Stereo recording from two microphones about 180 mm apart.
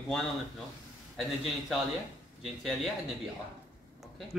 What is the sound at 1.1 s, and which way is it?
A man's voice, centre (ahead or behind).